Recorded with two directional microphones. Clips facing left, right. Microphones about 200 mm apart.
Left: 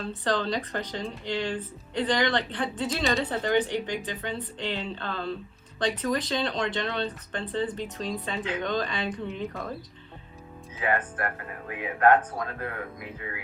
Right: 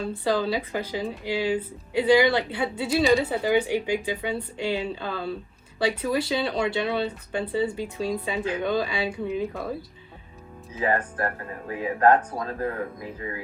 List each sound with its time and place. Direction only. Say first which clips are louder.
0.0 s speech: right 3 dB; 10° right (ahead or behind)
10.8 s speech: right 3 dB; 35° right (ahead or behind)